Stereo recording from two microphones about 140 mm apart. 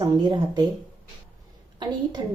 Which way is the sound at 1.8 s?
30° right (ahead or behind).